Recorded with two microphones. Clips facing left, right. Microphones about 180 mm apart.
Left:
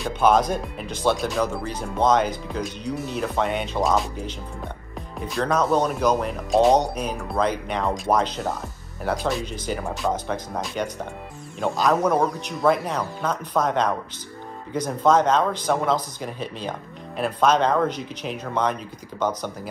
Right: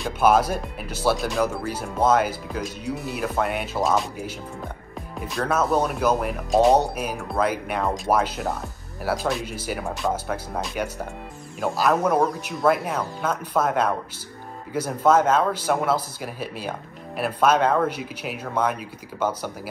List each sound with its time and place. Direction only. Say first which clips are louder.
0.0 s speech: even; 5° right (ahead or behind)